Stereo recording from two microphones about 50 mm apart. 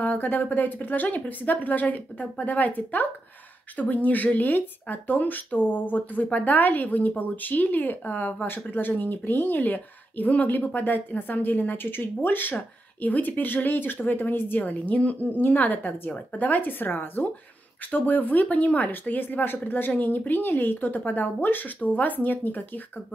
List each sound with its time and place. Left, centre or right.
0.0 s speech: left